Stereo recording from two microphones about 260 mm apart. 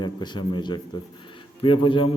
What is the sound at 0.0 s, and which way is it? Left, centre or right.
A man's voice, centre.